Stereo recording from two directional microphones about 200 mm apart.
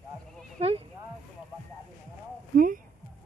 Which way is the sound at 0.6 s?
30° right (ahead or behind).